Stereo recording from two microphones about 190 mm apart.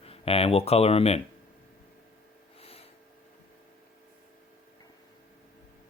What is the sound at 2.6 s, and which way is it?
Snort, 30° left (ahead or behind).